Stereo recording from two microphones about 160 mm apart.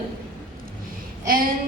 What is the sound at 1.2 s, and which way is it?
Speech, 60° right (ahead or behind).